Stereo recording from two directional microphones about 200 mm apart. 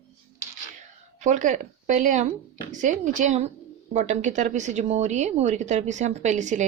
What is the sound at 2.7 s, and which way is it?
Speech, 40° right (ahead or behind).